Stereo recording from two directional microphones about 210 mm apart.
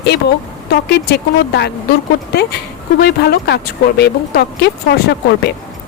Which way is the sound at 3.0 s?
50° left (ahead or behind).